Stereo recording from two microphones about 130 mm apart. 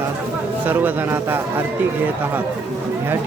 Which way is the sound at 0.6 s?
15° right (ahead or behind).